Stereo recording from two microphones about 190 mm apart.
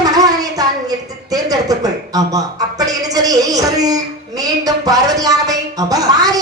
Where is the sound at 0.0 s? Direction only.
20° right (ahead or behind).